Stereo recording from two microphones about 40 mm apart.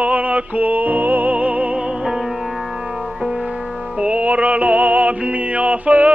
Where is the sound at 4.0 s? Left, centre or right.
Right.